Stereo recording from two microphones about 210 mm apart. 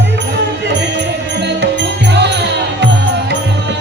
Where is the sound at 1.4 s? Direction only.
55° right (ahead or behind).